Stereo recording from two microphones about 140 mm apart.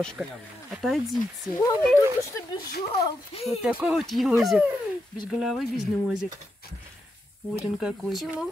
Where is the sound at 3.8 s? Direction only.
Centre (ahead or behind).